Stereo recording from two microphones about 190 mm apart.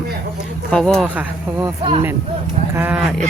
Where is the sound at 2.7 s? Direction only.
10° right (ahead or behind).